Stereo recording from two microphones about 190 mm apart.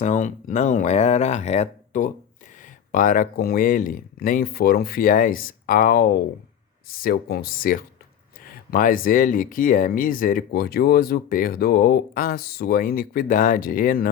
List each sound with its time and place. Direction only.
0.0 s speech: 40° left (ahead or behind)